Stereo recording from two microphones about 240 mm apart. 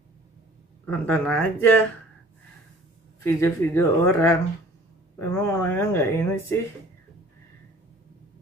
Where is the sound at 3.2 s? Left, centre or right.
Centre.